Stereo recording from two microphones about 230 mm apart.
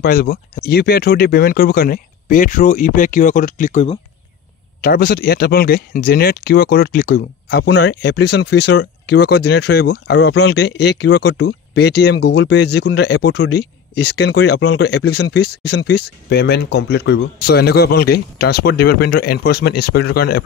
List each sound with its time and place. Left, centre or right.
0.0 s speech: left
4.8 s speech: left